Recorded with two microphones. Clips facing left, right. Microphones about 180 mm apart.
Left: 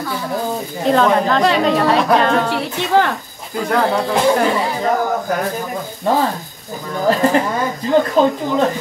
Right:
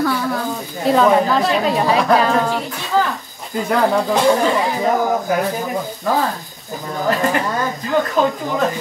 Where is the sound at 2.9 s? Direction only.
70° left (ahead or behind).